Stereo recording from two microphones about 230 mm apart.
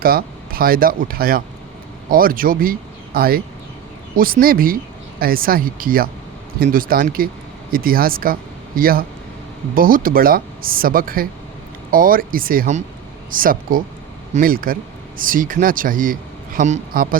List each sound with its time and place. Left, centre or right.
0.0 s speech: right